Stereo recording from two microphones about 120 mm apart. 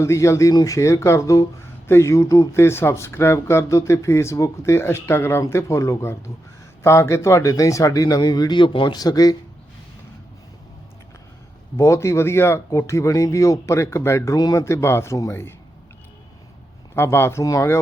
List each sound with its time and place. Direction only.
0.0 s a man's voice: 25° left (ahead or behind)
11.8 s speech: 25° left (ahead or behind)
16.9 s speech: 20° left (ahead or behind)